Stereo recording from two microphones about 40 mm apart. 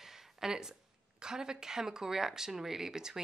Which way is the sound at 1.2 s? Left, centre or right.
Centre.